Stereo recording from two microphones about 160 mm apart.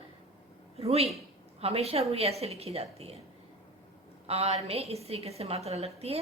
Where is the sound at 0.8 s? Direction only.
40° right (ahead or behind).